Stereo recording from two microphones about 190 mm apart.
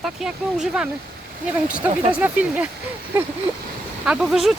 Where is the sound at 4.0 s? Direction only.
5° right (ahead or behind).